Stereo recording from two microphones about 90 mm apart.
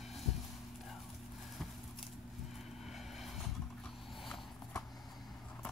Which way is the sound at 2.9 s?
Centre (ahead or behind).